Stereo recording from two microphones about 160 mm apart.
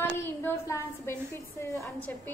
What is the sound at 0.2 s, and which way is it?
A woman's voice, 15° left (ahead or behind).